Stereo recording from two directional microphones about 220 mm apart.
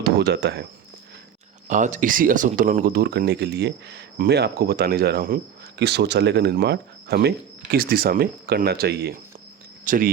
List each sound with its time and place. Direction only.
0.0 s speech: 50° right (ahead or behind)
1.6 s speech: 35° right (ahead or behind)